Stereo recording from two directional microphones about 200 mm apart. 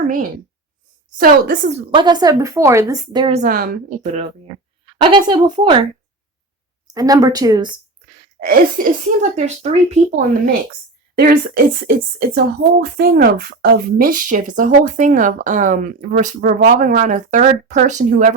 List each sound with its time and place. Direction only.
0.0 s a woman's voice: 45° right (ahead or behind)
1.9 s speech: 20° right (ahead or behind)
3.3 s speech: 45° right (ahead or behind)
5.1 s speech: 25° right (ahead or behind)
6.8 s speech: 15° right (ahead or behind)
8.4 s a woman's voice: 45° right (ahead or behind)
9.9 s a woman's voice: 45° right (ahead or behind)